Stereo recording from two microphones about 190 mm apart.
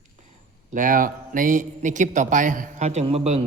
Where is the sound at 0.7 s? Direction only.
45° right (ahead or behind).